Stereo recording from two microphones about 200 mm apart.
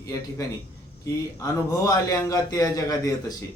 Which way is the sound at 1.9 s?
15° left (ahead or behind).